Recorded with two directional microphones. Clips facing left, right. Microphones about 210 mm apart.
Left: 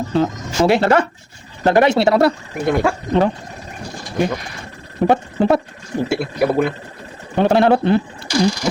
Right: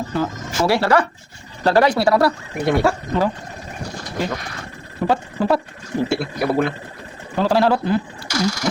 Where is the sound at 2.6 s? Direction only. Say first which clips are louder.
Even; centre (ahead or behind).